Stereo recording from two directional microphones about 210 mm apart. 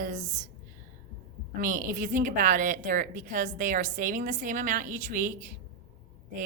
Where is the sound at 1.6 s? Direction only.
40° right (ahead or behind).